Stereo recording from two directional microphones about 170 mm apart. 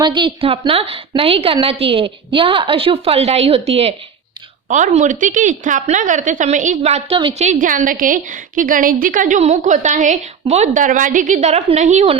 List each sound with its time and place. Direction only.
0.0 s a woman's voice: 30° right (ahead or behind)
7.4 s a woman's voice: 50° right (ahead or behind)